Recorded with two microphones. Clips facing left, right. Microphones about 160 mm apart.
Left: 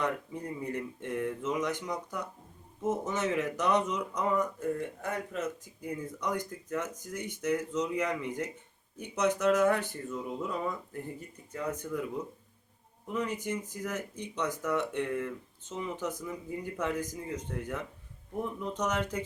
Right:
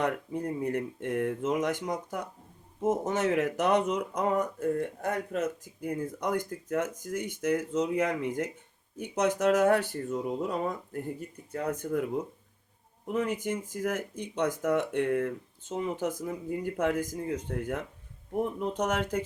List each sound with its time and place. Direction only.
0.0 s speech: 55° right (ahead or behind)
5.8 s speech: 55° right (ahead or behind)